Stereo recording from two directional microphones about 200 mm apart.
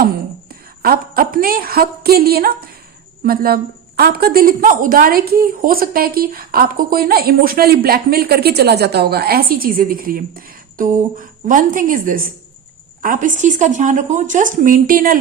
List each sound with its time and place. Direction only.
0.8 s a woman's voice: 50° right (ahead or behind)